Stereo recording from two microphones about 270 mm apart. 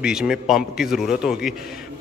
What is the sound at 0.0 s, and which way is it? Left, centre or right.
Speech, centre.